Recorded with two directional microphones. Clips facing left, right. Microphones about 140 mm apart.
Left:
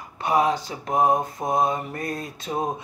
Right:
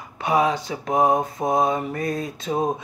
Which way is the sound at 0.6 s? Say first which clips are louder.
Right 1 dB; 20° right (ahead or behind).